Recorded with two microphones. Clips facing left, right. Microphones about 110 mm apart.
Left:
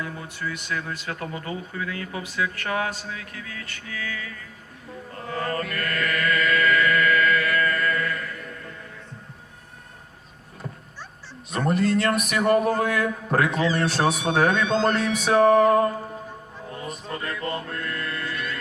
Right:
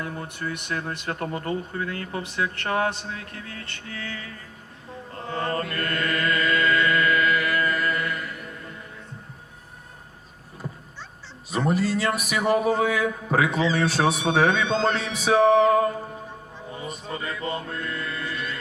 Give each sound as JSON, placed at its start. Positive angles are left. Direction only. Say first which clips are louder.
{"t": 0.0, "sound": "speech", "louder": "right 1 dB", "side_deg": -50}
{"t": 2.2, "sound": "speech", "louder": "left 1 dB", "side_deg": -30}
{"t": 3.2, "sound": "a sound", "louder": "even", "side_deg": -35}
{"t": 5.1, "sound": "chant", "louder": "right 1 dB", "side_deg": -25}
{"t": 10.6, "sound": "vehicle", "louder": "right 1 dB", "side_deg": -5}
{"t": 11.5, "sound": "a sound", "louder": "left 1 dB", "side_deg": -5}
{"t": 16.6, "sound": "music", "louder": "even", "side_deg": -5}